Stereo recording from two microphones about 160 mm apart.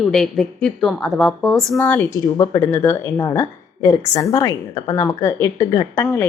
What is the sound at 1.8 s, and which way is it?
A woman's voice, 10° left (ahead or behind).